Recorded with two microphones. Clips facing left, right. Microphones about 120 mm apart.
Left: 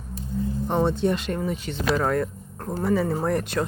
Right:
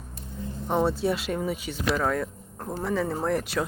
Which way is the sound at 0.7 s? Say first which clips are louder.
Left 1 dB; 5° right (ahead or behind).